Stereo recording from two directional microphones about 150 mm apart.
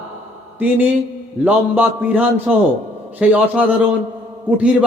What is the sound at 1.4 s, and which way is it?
Speech, 10° right (ahead or behind).